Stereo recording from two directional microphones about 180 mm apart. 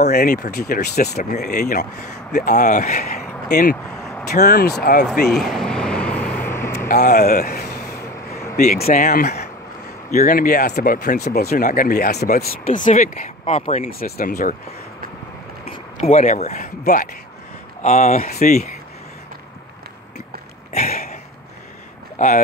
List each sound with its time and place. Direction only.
0.1 s speech: 55° left (ahead or behind)
4.3 s speech: 60° left (ahead or behind)
5.3 s vehicle: centre (ahead or behind)
6.9 s speech: 50° left (ahead or behind)
11.5 s speech: 50° left (ahead or behind)
13.8 s speech: 55° left (ahead or behind)
15.7 s speech: 40° left (ahead or behind)
16.6 s speech: 50° left (ahead or behind)
20.9 s a sound: 55° left (ahead or behind)
22.2 s speech: 45° left (ahead or behind)